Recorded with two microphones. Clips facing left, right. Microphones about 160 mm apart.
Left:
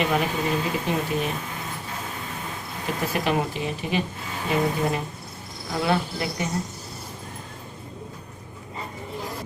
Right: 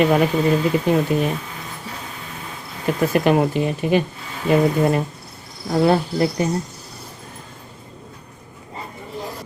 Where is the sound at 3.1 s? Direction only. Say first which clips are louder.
Right 8 dB; 50° right (ahead or behind).